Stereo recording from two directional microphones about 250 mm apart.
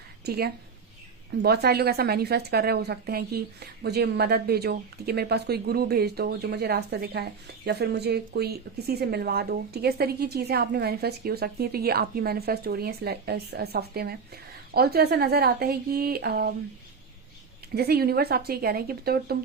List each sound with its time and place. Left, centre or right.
0.3 s a woman's voice: right
17.7 s a woman's voice: right